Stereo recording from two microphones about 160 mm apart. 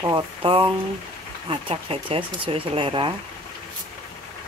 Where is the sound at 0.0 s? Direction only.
30° right (ahead or behind).